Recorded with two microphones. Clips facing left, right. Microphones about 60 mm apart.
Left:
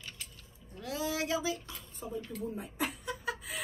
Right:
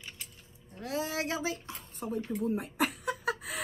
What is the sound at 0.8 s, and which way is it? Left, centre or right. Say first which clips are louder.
Speech: right 1 dB; right.